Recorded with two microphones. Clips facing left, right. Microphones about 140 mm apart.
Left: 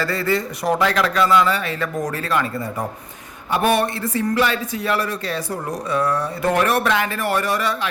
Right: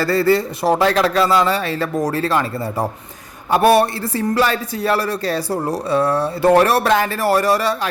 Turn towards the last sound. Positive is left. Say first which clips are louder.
# right 5 dB
turn(degrees=-35)  # may be behind; listen again after turning